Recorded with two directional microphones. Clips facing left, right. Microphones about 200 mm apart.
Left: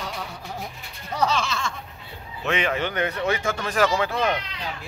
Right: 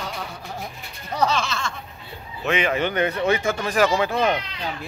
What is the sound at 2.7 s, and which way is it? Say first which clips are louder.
Speech: right 3 dB; 20° right (ahead or behind).